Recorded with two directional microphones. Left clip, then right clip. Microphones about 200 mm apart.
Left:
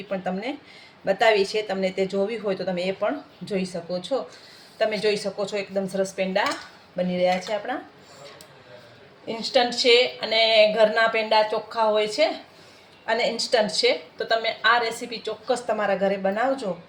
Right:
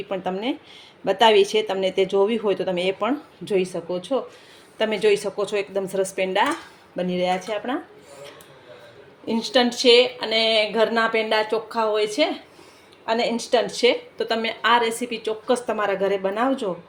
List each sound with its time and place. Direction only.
0.1 s speech: 30° right (ahead or behind)
1.8 s speech: centre (ahead or behind)
2.0 s speech: 30° right (ahead or behind)
4.8 s speech: 40° right (ahead or behind)
9.2 s speech: 40° right (ahead or behind)